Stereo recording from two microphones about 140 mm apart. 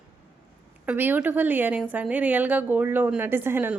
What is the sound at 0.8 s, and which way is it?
A woman's voice, 15° right (ahead or behind).